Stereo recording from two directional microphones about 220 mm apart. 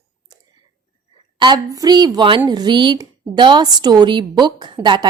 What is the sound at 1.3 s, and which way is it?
A woman's voice, 20° right (ahead or behind).